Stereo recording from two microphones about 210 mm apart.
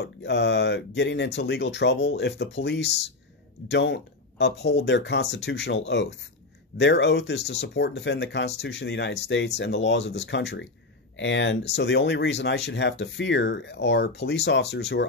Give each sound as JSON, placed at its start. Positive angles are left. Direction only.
{"t": 0.0, "sound": "speech", "side_deg": 55}